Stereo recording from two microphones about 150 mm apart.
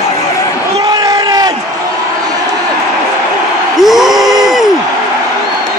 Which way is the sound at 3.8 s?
Centre (ahead or behind).